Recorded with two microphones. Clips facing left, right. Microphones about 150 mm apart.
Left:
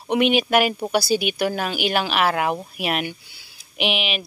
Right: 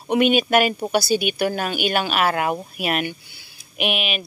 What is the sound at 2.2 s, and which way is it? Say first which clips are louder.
Speech: even; centre (ahead or behind).